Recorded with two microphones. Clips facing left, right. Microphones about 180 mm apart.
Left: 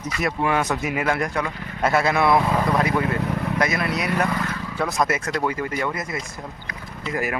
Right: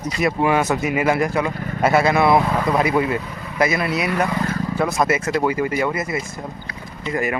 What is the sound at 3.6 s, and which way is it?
Speech, 5° right (ahead or behind).